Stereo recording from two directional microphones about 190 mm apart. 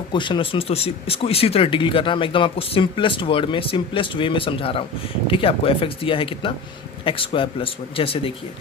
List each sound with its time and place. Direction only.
0.1 s speech: 25° left (ahead or behind)